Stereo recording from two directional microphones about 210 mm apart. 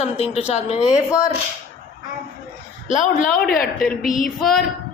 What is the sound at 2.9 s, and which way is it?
Speech, 35° left (ahead or behind).